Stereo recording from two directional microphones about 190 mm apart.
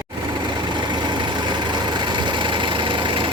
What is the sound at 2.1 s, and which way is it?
Vehicle, 25° right (ahead or behind).